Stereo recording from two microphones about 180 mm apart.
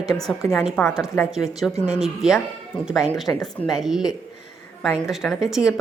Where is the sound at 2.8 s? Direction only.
5° right (ahead or behind).